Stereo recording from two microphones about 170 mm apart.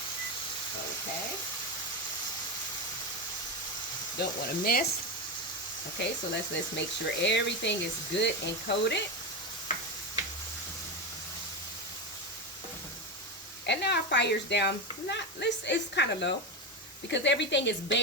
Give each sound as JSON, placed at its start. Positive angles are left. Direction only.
{"t": 4.2, "sound": "speech", "side_deg": 65}
{"t": 6.0, "sound": "speech", "side_deg": 90}
{"t": 13.7, "sound": "sizzle", "side_deg": 90}
{"t": 15.1, "sound": "speech", "side_deg": 90}